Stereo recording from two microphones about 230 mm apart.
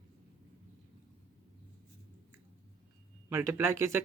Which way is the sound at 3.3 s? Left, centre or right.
Centre.